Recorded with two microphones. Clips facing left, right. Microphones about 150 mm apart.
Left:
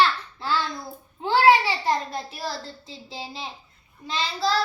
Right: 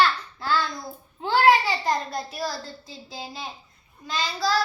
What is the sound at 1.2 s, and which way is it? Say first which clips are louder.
Babbling: left 1 dB; 25° left (ahead or behind).